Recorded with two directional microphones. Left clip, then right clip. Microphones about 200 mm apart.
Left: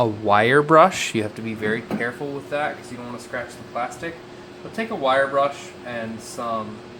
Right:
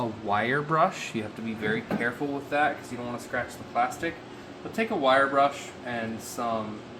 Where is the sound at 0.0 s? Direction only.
50° left (ahead or behind).